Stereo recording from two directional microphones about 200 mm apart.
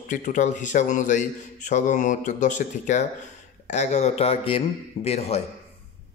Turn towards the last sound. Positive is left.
turn(degrees=30)  # may be behind; listen again after turning